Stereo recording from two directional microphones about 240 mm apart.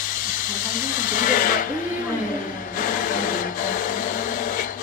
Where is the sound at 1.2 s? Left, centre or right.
Left.